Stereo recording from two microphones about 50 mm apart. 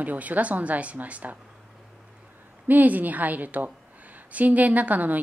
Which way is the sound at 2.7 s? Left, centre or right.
Right.